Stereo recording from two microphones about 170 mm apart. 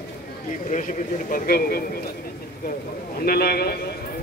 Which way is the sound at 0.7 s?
50° left (ahead or behind).